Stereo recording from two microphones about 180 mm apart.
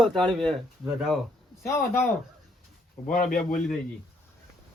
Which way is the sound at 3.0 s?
50° left (ahead or behind).